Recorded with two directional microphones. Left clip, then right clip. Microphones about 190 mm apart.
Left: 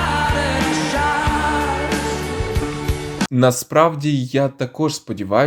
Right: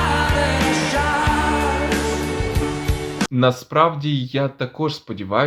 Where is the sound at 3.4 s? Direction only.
35° left (ahead or behind).